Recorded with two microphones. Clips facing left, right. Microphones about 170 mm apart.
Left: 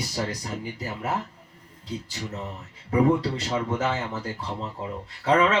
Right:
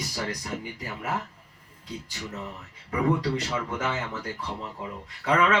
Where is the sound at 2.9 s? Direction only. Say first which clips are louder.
Left 4 dB; 30° left (ahead or behind).